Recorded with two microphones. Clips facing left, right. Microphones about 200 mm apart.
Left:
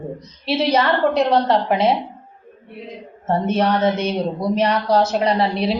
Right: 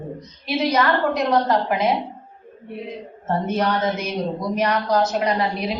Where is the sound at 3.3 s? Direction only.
30° left (ahead or behind).